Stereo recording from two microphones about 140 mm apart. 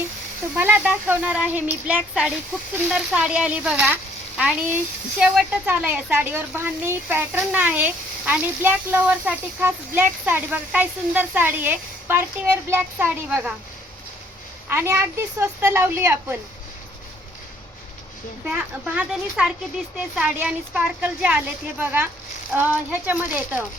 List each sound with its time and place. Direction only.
0.5 s speech: 10° right (ahead or behind)
14.7 s speech: 15° right (ahead or behind)
18.5 s speech: 10° right (ahead or behind)